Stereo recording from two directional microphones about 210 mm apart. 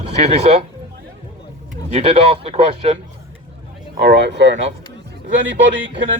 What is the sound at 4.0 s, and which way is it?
Speech, 55° right (ahead or behind).